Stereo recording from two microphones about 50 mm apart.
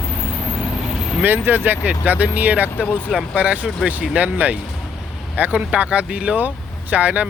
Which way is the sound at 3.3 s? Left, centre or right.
Right.